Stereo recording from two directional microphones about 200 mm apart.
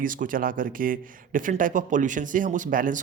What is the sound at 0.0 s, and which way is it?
Speech, 45° right (ahead or behind).